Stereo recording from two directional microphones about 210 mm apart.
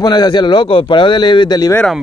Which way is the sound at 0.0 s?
20° left (ahead or behind).